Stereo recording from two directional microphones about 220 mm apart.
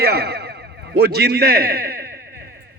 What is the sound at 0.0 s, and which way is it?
A man's voice, 45° right (ahead or behind).